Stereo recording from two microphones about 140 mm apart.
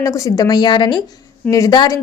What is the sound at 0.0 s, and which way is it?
A woman's voice, 20° left (ahead or behind).